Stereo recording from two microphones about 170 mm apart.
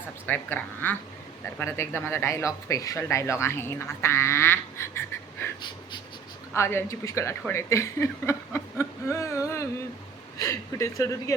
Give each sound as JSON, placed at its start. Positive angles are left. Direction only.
{"t": 0.3, "sound": "speech", "side_deg": 10}
{"t": 6.5, "sound": "speech", "side_deg": 15}